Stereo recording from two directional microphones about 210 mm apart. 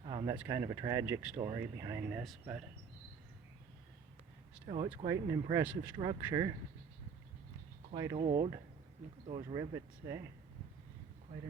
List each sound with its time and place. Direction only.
0.0 s a sound: 20° right (ahead or behind)
0.3 s speech: 15° right (ahead or behind)
1.4 s speech: 20° right (ahead or behind)
2.2 s speech: centre (ahead or behind)
4.6 s speech: 30° right (ahead or behind)
5.0 s speech: 20° right (ahead or behind)
7.9 s speech: 25° right (ahead or behind)